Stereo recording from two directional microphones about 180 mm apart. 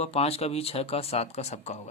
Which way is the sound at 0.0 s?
35° left (ahead or behind).